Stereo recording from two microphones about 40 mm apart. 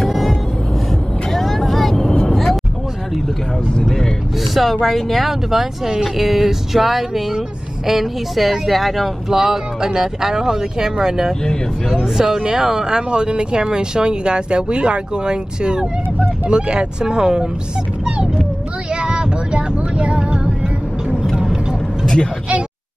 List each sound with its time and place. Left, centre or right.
0.1 s vehicle: centre
2.2 s a sound: centre
4.8 s speech: centre
9.3 s speech: centre
18.0 s a sound: right
18.9 s music: right
22.0 s vehicle: centre